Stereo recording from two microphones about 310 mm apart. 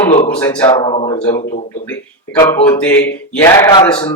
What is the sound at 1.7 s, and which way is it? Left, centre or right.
Speech, centre.